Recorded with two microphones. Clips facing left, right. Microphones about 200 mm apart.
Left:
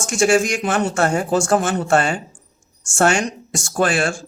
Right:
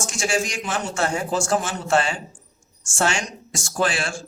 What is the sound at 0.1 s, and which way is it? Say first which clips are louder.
Speech: left 10 dB; 60° left (ahead or behind).